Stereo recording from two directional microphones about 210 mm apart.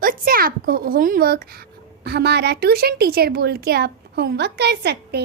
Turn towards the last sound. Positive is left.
turn(degrees=-50)  # may be behind; listen again after turning